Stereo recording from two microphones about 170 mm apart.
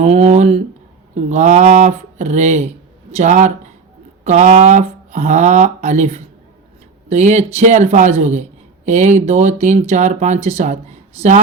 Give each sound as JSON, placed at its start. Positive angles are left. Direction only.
{"t": 0.0, "sound": "speech", "side_deg": -40}